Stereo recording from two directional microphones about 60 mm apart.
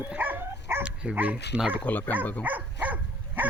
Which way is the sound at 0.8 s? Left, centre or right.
Centre.